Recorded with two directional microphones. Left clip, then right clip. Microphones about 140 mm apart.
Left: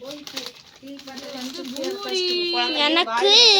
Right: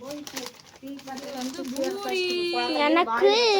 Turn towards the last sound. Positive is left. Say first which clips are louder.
# left 5 dB
turn(degrees=-15)  # may be behind; listen again after turning